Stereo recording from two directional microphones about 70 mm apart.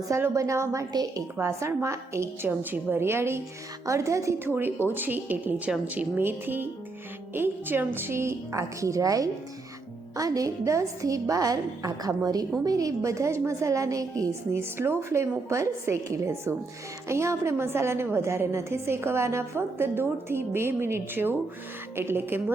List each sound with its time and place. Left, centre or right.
0.3 s a woman's voice: right
2.5 s a woman's voice: right
3.8 s a woman's voice: right
4.4 s a woman's voice: right
14.5 s a woman's voice: right